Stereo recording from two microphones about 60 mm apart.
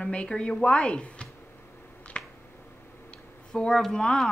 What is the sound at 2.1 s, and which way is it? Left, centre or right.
Finger snapping, left.